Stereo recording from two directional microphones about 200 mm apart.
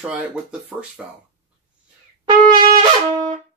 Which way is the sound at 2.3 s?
20° right (ahead or behind).